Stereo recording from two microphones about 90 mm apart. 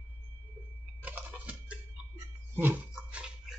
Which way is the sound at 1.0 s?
15° right (ahead or behind).